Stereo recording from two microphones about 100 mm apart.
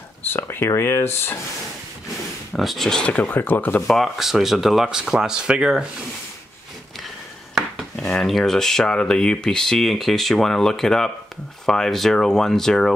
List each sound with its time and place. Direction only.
0.3 s speech: 20° left (ahead or behind)
2.5 s speech: centre (ahead or behind); by 3.8 s 20° left (ahead or behind)
3.8 s speech: centre (ahead or behind)
7.5 s speech: 5° left (ahead or behind)